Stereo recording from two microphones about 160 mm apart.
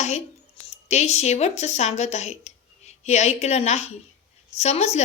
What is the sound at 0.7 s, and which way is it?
A woman's voice, 45° left (ahead or behind).